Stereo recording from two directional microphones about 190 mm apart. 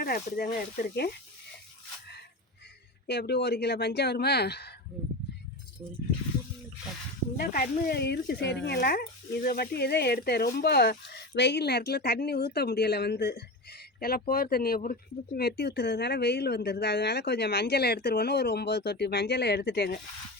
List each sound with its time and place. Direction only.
0.0 s speech: 50° left (ahead or behind)
3.1 s speech: 60° left (ahead or behind)
7.4 s speech: 50° left (ahead or behind)